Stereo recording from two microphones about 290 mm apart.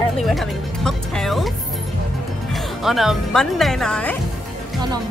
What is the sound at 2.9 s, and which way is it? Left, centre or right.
A woman's voice, centre.